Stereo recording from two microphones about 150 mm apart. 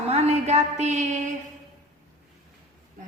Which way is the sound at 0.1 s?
45° right (ahead or behind).